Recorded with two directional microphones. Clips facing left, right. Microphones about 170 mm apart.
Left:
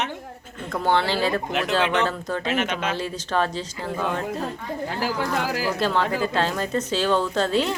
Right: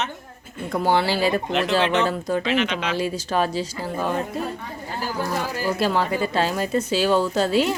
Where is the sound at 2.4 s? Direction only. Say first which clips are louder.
Right 2 dB; 45° left (ahead or behind).